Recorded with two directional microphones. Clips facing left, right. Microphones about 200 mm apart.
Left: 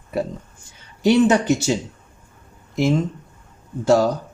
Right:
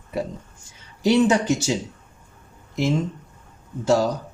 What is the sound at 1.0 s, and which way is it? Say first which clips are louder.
Speech: left 2 dB; 60° left (ahead or behind).